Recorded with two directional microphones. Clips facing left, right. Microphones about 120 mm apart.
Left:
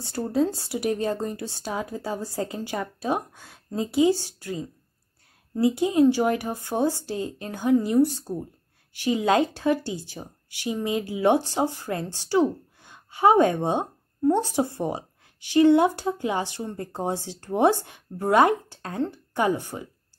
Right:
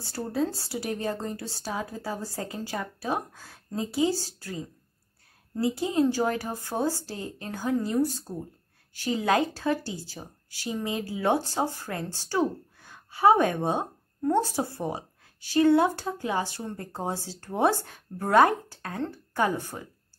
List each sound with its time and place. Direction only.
0.0 s speech: 20° left (ahead or behind)